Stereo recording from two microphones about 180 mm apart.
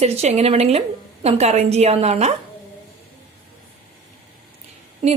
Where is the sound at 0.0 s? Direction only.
35° right (ahead or behind).